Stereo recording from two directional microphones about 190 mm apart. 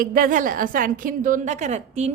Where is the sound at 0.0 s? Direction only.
45° right (ahead or behind).